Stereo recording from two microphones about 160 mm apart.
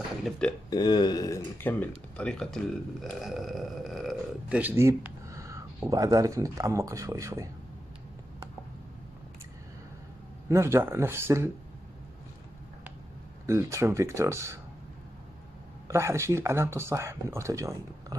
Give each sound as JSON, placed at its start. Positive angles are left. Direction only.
{"t": 0.2, "sound": "speech", "side_deg": 5}
{"t": 0.7, "sound": "speech", "side_deg": 25}
{"t": 4.6, "sound": "a sound", "side_deg": -15}
{"t": 5.9, "sound": "speech", "side_deg": -20}
{"t": 10.5, "sound": "speech", "side_deg": -15}
{"t": 13.5, "sound": "speech", "side_deg": -20}
{"t": 15.9, "sound": "speech", "side_deg": -15}